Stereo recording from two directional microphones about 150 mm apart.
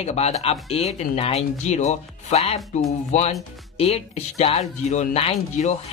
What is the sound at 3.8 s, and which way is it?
Speech, 45° left (ahead or behind).